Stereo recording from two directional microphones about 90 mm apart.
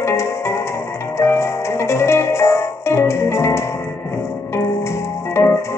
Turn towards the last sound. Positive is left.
turn(degrees=30)  # may be behind; listen again after turning